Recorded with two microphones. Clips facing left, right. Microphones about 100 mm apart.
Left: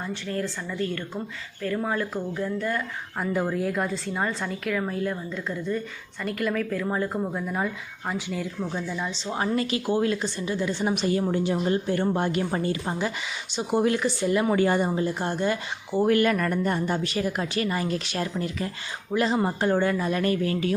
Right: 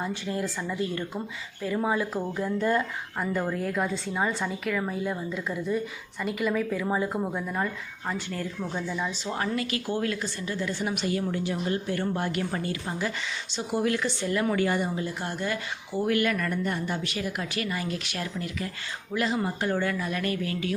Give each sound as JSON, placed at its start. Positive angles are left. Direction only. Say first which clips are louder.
{"t": 0.0, "sound": "speech", "louder": "even", "side_deg": -15}
{"t": 1.6, "sound": "speech", "louder": "even", "side_deg": -10}
{"t": 2.3, "sound": "speech", "louder": "right 4 dB", "side_deg": -20}
{"t": 3.2, "sound": "speech", "louder": "left 3 dB", "side_deg": 5}
{"t": 9.0, "sound": "speech", "louder": "even", "side_deg": -10}
{"t": 9.6, "sound": "a woman's voice", "louder": "left 4 dB", "side_deg": 25}
{"t": 9.8, "sound": "a woman's voice", "louder": "left 5 dB", "side_deg": 15}